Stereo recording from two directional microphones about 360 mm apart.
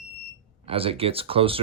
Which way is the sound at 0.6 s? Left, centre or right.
Centre.